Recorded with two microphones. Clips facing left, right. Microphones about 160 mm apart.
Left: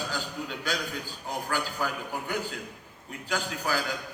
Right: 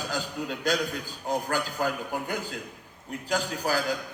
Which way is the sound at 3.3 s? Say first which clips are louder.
Right 3 dB; 35° right (ahead or behind).